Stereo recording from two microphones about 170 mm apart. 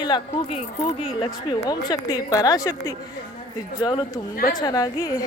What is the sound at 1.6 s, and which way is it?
Speech, 25° left (ahead or behind).